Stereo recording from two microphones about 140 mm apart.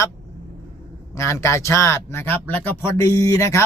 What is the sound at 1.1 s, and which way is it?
A man's voice, 20° left (ahead or behind).